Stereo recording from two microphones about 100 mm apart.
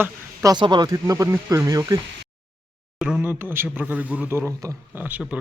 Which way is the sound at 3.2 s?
20° right (ahead or behind).